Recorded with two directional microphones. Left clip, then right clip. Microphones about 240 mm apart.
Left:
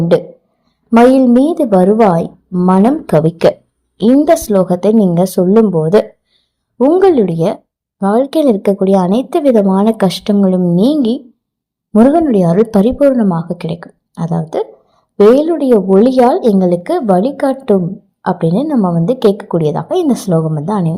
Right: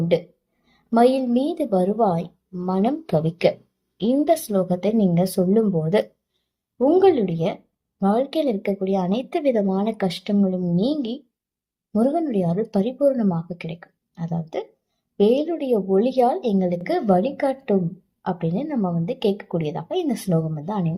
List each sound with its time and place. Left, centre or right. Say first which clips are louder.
0.9 s a woman's voice: left 10 dB; left
11.9 s a woman's voice: left 12 dB; left